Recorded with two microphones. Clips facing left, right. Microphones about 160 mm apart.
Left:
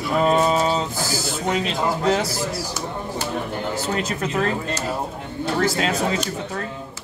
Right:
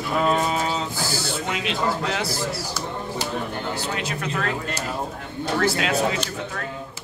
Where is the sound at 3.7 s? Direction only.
45° left (ahead or behind).